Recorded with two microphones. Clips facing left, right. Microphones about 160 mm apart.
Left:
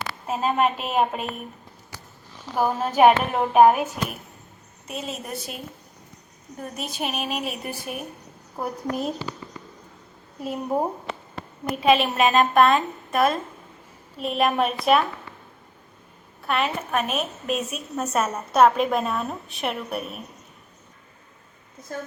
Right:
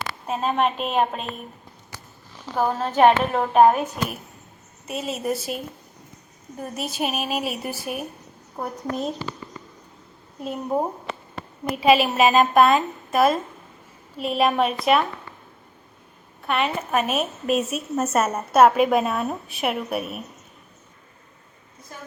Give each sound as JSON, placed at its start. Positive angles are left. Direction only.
{"t": 0.3, "sound": "a woman's voice", "side_deg": 5}
{"t": 2.6, "sound": "a woman's voice", "side_deg": 10}
{"t": 4.9, "sound": "a woman's voice", "side_deg": 0}
{"t": 6.6, "sound": "a woman's voice", "side_deg": -5}
{"t": 10.4, "sound": "a woman's voice", "side_deg": 5}
{"t": 11.7, "sound": "a woman's voice", "side_deg": -5}
{"t": 16.5, "sound": "a woman's voice", "side_deg": 0}